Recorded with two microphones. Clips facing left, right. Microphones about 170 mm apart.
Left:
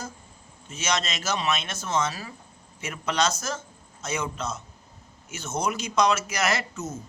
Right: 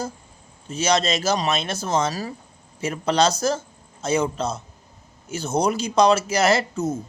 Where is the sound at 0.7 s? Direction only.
35° right (ahead or behind).